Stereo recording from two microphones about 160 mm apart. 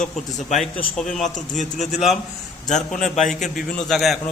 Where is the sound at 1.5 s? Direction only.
45° left (ahead or behind).